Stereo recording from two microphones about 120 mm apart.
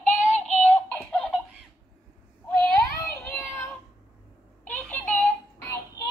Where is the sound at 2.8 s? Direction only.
25° left (ahead or behind).